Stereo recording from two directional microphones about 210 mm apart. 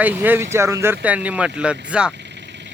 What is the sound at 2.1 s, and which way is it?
Vehicle, 55° right (ahead or behind).